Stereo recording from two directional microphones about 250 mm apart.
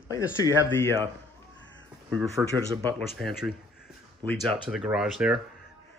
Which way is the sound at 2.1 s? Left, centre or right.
Centre.